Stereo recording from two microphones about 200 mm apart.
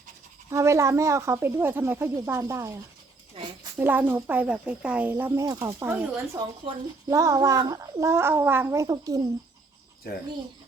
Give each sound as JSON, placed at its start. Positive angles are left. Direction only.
{"t": 0.5, "sound": "speech", "side_deg": -15}
{"t": 3.3, "sound": "a sound", "side_deg": -25}
{"t": 3.8, "sound": "speech", "side_deg": -10}